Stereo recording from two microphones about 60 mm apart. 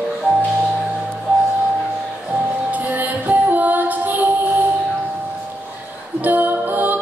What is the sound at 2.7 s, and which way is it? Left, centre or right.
Music, right.